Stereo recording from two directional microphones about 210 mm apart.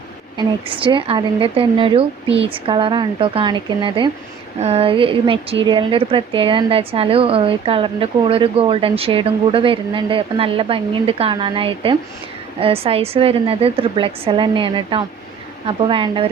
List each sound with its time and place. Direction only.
0.3 s a woman's voice: 25° right (ahead or behind)